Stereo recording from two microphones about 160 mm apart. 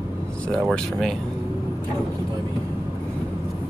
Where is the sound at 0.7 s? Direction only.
Centre (ahead or behind).